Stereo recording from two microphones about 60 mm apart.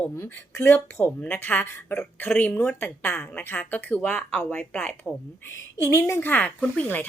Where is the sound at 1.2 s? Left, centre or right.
Left.